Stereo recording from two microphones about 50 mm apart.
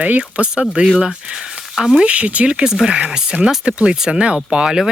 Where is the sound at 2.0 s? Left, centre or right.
Right.